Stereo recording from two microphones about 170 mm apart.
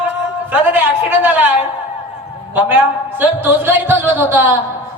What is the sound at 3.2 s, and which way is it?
Music, 10° right (ahead or behind).